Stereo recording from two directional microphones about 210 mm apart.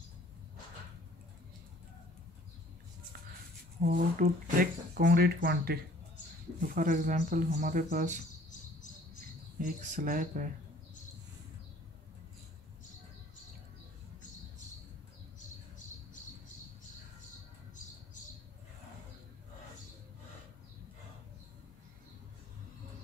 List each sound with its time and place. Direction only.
3.8 s speech: 40° right (ahead or behind)
9.6 s speech: 40° right (ahead or behind)